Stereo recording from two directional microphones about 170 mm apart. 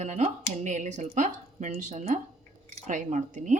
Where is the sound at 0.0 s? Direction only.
45° right (ahead or behind).